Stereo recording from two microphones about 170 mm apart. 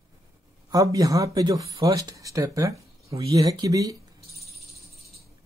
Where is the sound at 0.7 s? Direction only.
20° right (ahead or behind).